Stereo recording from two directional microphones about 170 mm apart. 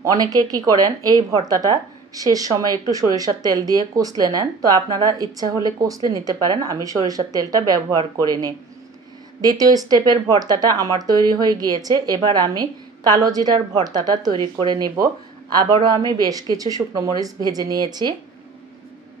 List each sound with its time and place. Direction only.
0.0 s a woman's voice: 20° right (ahead or behind)